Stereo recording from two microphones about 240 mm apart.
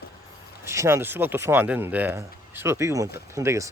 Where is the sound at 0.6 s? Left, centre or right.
Centre.